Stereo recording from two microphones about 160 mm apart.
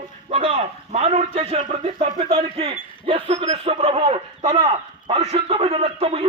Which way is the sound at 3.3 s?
40° right (ahead or behind).